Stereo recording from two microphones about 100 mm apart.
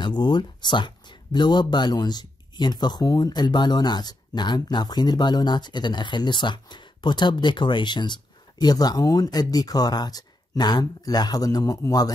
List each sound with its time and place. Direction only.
0.0 s speech: 50° left (ahead or behind)